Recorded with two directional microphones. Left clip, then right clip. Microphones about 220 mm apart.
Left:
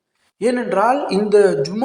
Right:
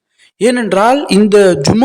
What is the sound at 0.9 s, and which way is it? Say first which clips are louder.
Speech: right 6 dB; 65° right (ahead or behind).